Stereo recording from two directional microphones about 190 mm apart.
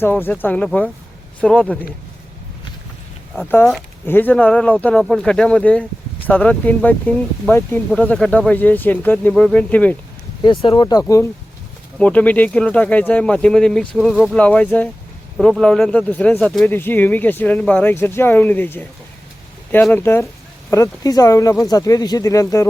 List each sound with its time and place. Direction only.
0.0 s speech: 10° left (ahead or behind)
3.5 s speech: 10° left (ahead or behind)
10.4 s speech: 30° left (ahead or behind)
11.9 s speech: 5° left (ahead or behind)